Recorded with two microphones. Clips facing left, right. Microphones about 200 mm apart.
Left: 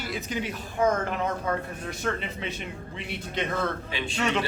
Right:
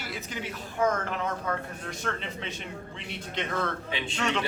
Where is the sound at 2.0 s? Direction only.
10° left (ahead or behind).